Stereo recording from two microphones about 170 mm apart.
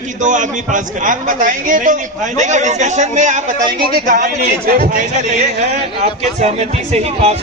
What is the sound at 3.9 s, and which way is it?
A man's voice, 60° right (ahead or behind).